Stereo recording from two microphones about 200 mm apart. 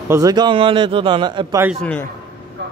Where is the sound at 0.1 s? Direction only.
20° right (ahead or behind).